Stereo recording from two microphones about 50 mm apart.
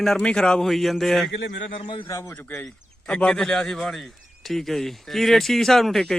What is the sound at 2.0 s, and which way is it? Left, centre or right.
Speech, left.